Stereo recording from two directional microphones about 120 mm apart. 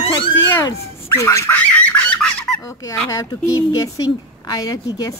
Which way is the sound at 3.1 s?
30° left (ahead or behind).